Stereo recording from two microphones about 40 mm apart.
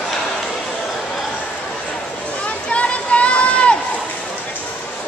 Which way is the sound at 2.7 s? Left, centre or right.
Left.